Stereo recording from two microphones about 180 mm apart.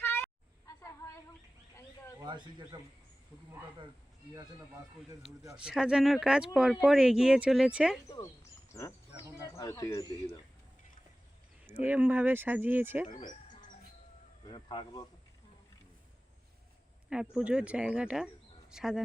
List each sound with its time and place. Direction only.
0.0 s a sound: 10° left (ahead or behind)
2.2 s speech: 25° right (ahead or behind)
5.5 s speech: 5° right (ahead or behind)
8.0 s speech: 20° left (ahead or behind)
11.8 s speech: 10° right (ahead or behind)
13.1 s speech: 25° left (ahead or behind)
14.4 s speech: 25° left (ahead or behind)
17.3 s speech: 5° right (ahead or behind)